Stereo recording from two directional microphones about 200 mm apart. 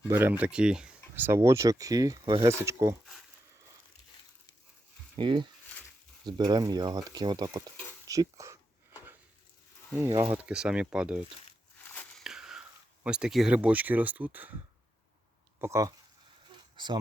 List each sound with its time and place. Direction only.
0.1 s speech: 10° right (ahead or behind)
5.1 s speech: 25° right (ahead or behind)
10.0 s speech: 10° right (ahead or behind)
11.8 s a sound: 10° left (ahead or behind); by 14.5 s 10° right (ahead or behind)
15.6 s speech: 15° right (ahead or behind)